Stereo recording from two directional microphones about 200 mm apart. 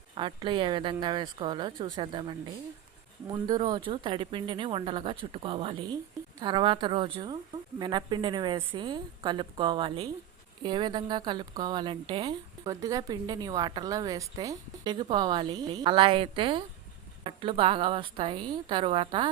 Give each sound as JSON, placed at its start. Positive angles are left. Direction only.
{"t": 0.2, "sound": "a woman's voice", "side_deg": -25}
{"t": 3.3, "sound": "a woman's voice", "side_deg": -20}